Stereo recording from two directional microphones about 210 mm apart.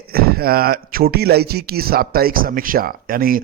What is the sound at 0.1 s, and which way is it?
A man's voice, 45° right (ahead or behind).